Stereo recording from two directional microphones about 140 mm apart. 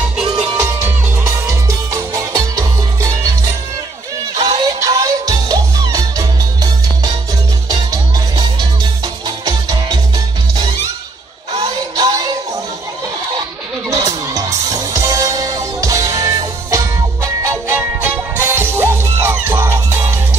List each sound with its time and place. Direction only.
1.2 s music: 25° right (ahead or behind)
4.4 s music: 25° right (ahead or behind)
7.7 s music: 30° right (ahead or behind)
11.9 s music: 30° right (ahead or behind)
13.8 s music: 25° right (ahead or behind)